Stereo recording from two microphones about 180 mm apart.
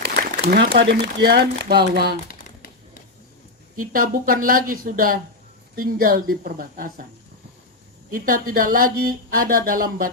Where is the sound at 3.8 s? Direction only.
50° right (ahead or behind).